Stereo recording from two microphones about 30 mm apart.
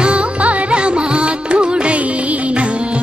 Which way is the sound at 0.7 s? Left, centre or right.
Right.